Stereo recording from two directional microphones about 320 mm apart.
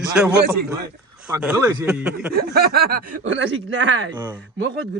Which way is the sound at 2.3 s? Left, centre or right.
Right.